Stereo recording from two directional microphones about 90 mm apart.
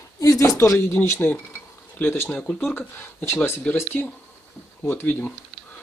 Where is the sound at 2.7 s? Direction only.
25° left (ahead or behind).